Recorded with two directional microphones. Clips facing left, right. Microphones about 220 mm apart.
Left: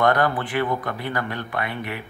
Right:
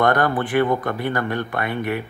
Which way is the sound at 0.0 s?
50° right (ahead or behind).